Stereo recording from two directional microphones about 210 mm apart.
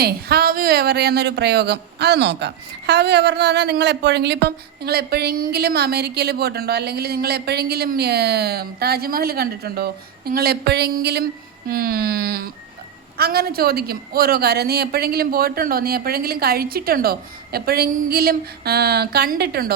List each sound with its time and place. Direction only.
0.0 s speech: 45° right (ahead or behind)